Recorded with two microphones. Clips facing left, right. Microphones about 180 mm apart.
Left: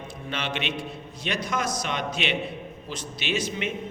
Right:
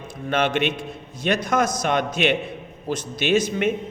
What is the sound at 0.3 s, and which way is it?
A man's voice, 50° right (ahead or behind).